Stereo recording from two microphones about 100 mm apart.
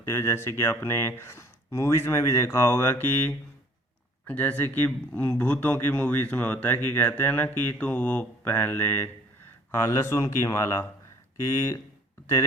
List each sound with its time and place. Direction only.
0.0 s speech: 25° left (ahead or behind)